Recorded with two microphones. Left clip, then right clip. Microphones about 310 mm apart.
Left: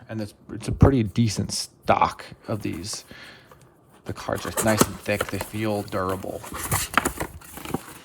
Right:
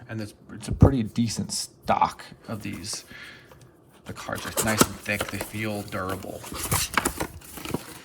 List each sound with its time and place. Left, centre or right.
0.1 s speech: centre
0.6 s speech: left; by 7.3 s centre
7.5 s a sound: centre